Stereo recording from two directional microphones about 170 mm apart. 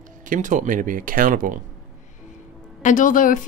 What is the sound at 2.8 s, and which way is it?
Speech, 50° left (ahead or behind).